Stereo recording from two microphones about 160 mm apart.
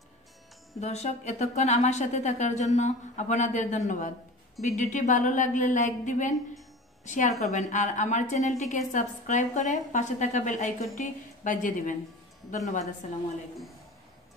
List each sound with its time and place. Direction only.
0.7 s a woman's voice: 45° left (ahead or behind)